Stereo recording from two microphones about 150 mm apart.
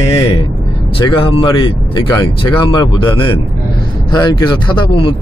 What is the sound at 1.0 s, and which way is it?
Speech, 35° left (ahead or behind).